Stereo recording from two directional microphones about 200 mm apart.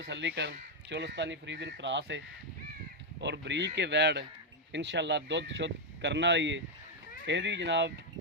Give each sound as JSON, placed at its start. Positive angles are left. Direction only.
{"t": 0.0, "sound": "speech", "side_deg": -60}